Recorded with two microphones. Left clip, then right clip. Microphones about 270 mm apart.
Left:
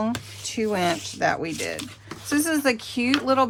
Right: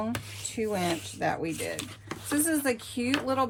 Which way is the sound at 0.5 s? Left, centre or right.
Left.